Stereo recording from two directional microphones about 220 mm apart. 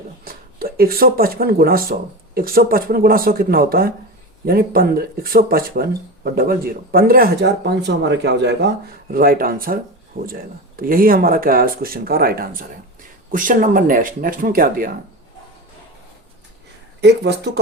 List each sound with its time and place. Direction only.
0.3 s speech: 40° right (ahead or behind)
17.0 s speech: 50° right (ahead or behind)